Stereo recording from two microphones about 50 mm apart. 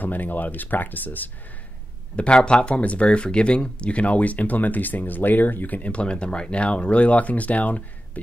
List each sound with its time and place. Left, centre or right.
0.0 s speech: left
2.3 s speech: centre